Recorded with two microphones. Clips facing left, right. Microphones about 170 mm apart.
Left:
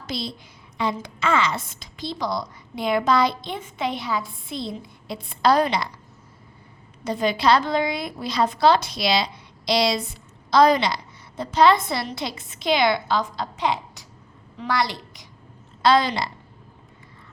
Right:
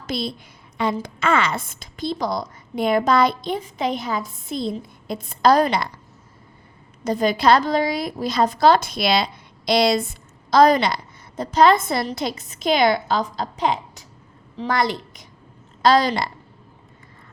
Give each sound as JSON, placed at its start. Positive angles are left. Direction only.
{"t": 1.0, "sound": "a woman's voice", "side_deg": -55}
{"t": 7.0, "sound": "a woman's voice", "side_deg": -45}
{"t": 15.8, "sound": "a woman's voice", "side_deg": -45}